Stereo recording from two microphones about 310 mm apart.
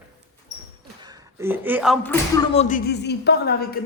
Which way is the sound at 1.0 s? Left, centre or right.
Centre.